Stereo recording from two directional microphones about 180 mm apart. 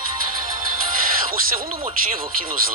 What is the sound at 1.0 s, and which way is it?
Speech, 50° right (ahead or behind).